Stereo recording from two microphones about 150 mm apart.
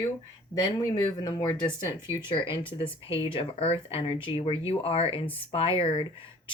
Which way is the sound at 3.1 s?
35° left (ahead or behind).